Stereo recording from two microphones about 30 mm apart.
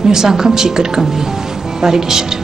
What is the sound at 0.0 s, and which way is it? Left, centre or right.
Speech, centre.